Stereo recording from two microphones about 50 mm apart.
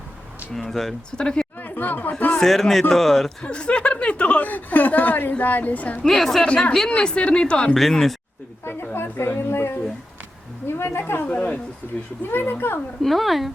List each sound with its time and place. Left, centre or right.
0.5 s speech: centre
1.1 s speech: centre
1.6 s speech: left
2.4 s speech: centre
3.4 s a woman's voice: left
6.0 s speech: centre
6.4 s a woman's voice: centre
7.8 s speech: centre
8.6 s speech: left
11.0 s a woman's voice: left
12.2 s speech: left
13.0 s speech: centre